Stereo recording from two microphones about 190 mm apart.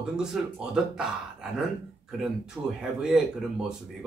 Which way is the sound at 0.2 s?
5° right (ahead or behind).